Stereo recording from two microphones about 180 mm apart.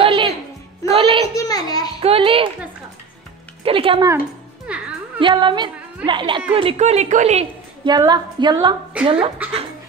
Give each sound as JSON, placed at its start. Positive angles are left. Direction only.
{"t": 0.0, "sound": "music", "side_deg": -30}
{"t": 1.3, "sound": "a sound", "side_deg": 20}
{"t": 2.0, "sound": "speech", "side_deg": -30}
{"t": 3.6, "sound": "speech", "side_deg": -30}
{"t": 4.7, "sound": "speech", "side_deg": -5}
{"t": 5.2, "sound": "a woman's voice", "side_deg": -25}
{"t": 7.8, "sound": "a woman's voice", "side_deg": -25}